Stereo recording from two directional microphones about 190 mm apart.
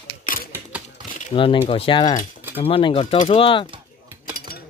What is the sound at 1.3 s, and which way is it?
Speech, 25° left (ahead or behind).